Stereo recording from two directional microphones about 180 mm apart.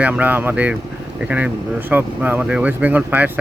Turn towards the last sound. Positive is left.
turn(degrees=-10)  # may be behind; listen again after turning